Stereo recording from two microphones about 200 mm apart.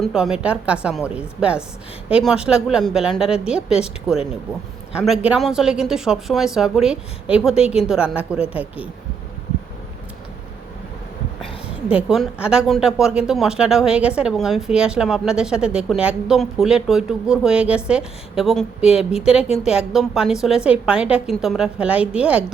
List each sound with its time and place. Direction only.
0.0 s speech: 5° right (ahead or behind)
11.9 s speech: 5° right (ahead or behind)
18.9 s a woman's voice: 30° left (ahead or behind)
19.2 s speech: 5° right (ahead or behind)